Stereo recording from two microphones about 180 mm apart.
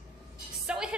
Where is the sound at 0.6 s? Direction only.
5° right (ahead or behind).